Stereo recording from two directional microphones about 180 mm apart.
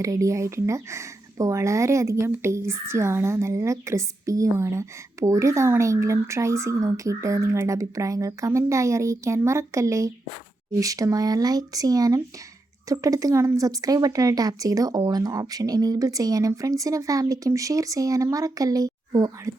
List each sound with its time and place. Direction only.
0.0 s speech: 20° right (ahead or behind)